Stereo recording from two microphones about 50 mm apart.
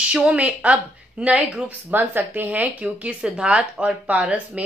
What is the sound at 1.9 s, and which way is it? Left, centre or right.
A woman's voice, right.